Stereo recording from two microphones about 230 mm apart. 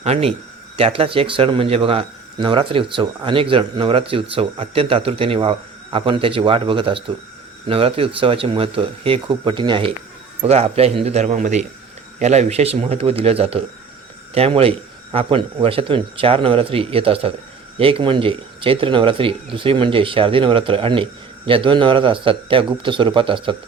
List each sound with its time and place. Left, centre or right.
0.0 s speech: right